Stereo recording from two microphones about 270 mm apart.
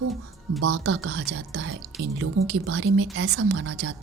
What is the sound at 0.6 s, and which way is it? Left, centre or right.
Speech, right.